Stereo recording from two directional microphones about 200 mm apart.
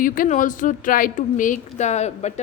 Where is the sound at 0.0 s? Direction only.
45° left (ahead or behind).